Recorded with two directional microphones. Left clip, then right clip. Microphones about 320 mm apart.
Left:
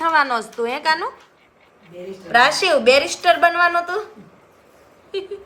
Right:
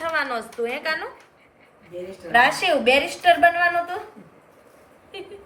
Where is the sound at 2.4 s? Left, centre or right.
Centre.